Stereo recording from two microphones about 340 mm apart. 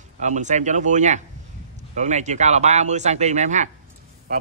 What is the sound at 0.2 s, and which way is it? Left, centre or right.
Speech, right.